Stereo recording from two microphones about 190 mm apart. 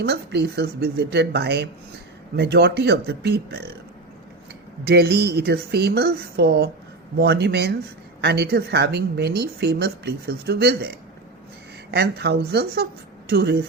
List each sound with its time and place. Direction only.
0.0 s speech: 60° right (ahead or behind)
4.9 s speech: 60° right (ahead or behind)